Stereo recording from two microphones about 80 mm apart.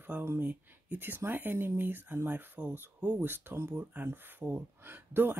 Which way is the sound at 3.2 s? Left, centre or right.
Right.